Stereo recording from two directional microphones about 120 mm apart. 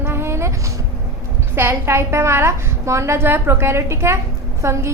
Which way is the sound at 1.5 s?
20° right (ahead or behind).